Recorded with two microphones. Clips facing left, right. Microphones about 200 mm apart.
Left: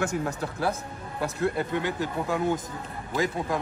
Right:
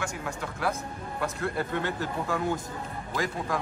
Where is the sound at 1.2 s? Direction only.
20° left (ahead or behind).